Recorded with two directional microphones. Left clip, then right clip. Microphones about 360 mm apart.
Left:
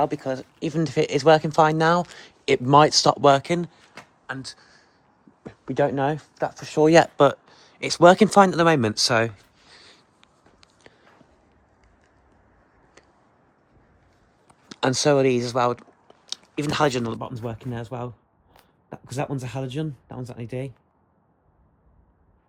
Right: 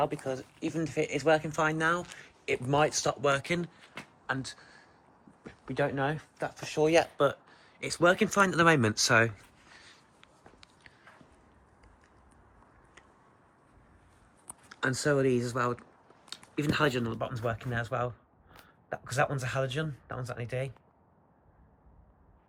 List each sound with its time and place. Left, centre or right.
0.0 s speech: centre
5.4 s speech: left
7.3 s speech: centre
9.8 s a sound: centre
14.7 s speech: centre